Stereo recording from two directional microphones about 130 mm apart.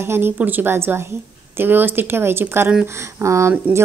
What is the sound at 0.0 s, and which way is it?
Speech, 20° right (ahead or behind).